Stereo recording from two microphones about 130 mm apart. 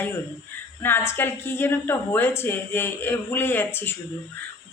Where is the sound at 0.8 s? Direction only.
15° left (ahead or behind).